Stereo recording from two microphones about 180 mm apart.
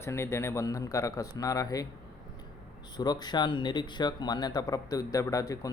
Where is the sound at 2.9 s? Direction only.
25° left (ahead or behind).